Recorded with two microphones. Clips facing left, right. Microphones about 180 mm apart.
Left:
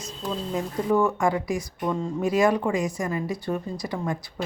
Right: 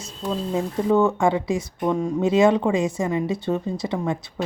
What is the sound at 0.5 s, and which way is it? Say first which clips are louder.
Speech: right 3 dB; 25° right (ahead or behind).